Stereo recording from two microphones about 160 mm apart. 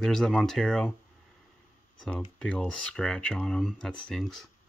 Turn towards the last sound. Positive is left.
turn(degrees=0)  # may be behind; listen again after turning